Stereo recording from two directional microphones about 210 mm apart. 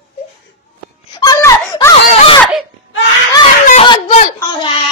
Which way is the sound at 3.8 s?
25° left (ahead or behind).